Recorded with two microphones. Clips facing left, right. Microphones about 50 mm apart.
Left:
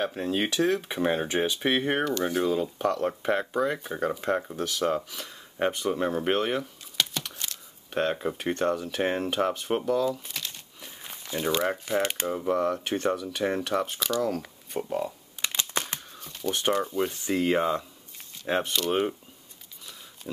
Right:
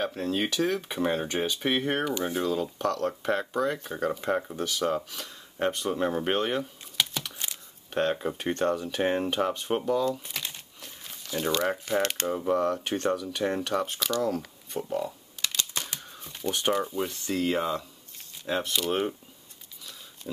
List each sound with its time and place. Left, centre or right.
0.0 s speech: centre
5.3 s a sound: centre
7.9 s speech: centre
10.8 s walk: centre
11.3 s speech: centre
14.3 s camera: centre
14.8 s speech: centre
15.7 s a sound: left
16.2 s speech: centre
17.0 s speech: centre
18.5 s speech: left
18.9 s speech: centre